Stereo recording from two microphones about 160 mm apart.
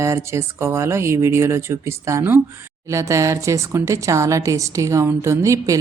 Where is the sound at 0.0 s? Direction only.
15° right (ahead or behind).